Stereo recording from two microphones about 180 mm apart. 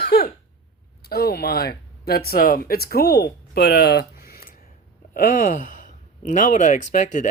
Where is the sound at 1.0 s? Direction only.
60° left (ahead or behind).